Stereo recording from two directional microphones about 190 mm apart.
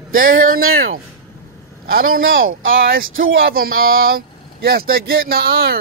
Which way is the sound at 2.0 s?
90° right.